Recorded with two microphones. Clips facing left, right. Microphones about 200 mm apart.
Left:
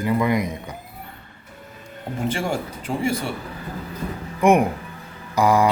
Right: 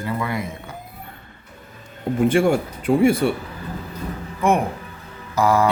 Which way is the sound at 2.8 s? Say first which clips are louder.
Right 8 dB; 55° right (ahead or behind).